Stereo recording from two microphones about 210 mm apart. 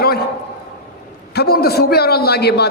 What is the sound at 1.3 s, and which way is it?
A man's voice, 50° left (ahead or behind).